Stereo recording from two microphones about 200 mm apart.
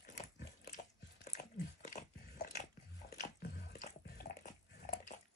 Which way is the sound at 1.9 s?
40° left (ahead or behind).